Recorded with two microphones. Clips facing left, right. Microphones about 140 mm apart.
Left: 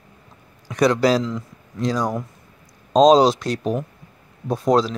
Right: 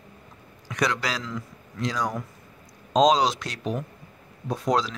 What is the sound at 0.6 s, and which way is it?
Speech, 35° left (ahead or behind).